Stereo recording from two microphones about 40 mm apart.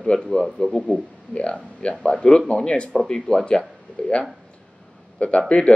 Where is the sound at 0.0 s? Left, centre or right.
Left.